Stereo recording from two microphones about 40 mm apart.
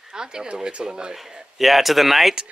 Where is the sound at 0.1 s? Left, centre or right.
Centre.